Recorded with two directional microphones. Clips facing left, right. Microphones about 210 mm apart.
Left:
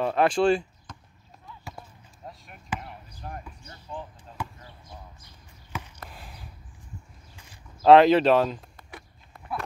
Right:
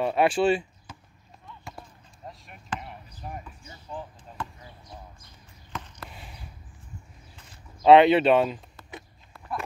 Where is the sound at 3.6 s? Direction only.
5° right (ahead or behind).